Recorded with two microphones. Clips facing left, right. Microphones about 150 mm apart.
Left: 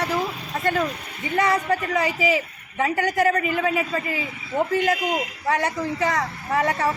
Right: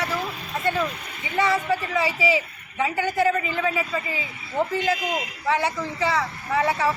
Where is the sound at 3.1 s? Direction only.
45° left (ahead or behind).